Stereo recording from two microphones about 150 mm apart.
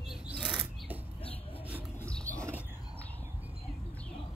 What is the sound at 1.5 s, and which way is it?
Rub, 10° right (ahead or behind).